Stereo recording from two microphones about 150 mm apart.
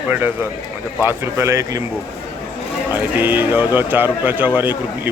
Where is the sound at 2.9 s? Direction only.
15° right (ahead or behind).